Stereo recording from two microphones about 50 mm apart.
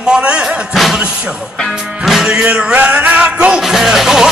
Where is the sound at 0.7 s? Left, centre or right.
Centre.